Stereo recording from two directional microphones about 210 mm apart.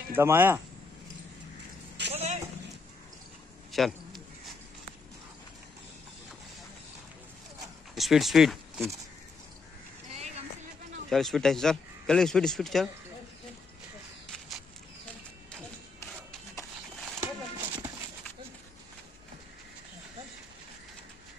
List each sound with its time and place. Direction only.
0.1 s speech: 10° right (ahead or behind)
2.1 s a sound: 30° right (ahead or behind)
3.7 s a sound: centre (ahead or behind)
7.9 s speech: centre (ahead or behind)
11.1 s a man's voice: centre (ahead or behind)
17.0 s horse: 10° right (ahead or behind)